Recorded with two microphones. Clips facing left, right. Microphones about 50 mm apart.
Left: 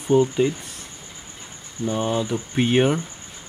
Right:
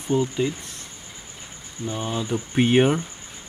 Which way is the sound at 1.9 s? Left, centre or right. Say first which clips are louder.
Left 5 dB; centre.